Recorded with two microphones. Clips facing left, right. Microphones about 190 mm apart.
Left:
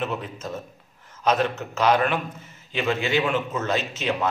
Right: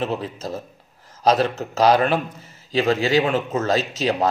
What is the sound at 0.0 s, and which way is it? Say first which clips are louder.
A man's voice: right 4 dB; 35° right (ahead or behind).